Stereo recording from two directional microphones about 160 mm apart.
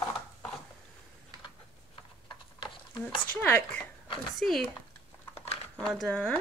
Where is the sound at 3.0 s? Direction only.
10° left (ahead or behind).